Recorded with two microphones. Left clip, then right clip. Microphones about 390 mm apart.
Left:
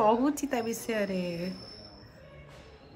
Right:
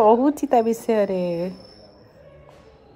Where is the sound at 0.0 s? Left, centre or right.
Centre.